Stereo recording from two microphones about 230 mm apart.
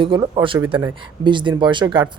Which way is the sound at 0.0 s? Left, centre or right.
Centre.